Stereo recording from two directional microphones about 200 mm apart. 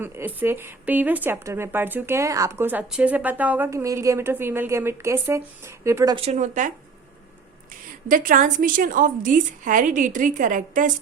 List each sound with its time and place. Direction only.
0.0 s speech: 10° right (ahead or behind)
6.1 s a woman's voice: 35° right (ahead or behind)
8.0 s a woman's voice: 45° right (ahead or behind)